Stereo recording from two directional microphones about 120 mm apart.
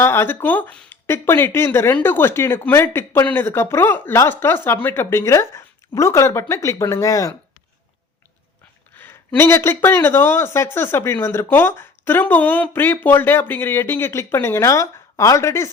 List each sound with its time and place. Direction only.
0.0 s speech: 20° left (ahead or behind)
9.0 s speech: 20° left (ahead or behind)